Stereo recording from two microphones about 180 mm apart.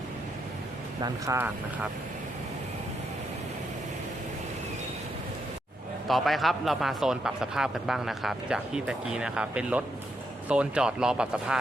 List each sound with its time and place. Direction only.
1.0 s speech: 15° right (ahead or behind)
6.1 s a man's voice: centre (ahead or behind)